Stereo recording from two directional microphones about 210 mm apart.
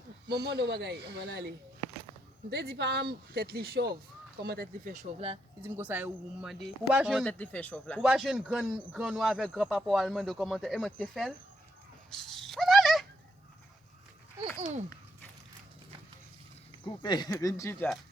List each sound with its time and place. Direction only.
0.3 s speech: 50° right (ahead or behind)
5.6 s speech: 10° right (ahead or behind)
12.1 s a sound: centre (ahead or behind)
16.8 s speech: 20° left (ahead or behind)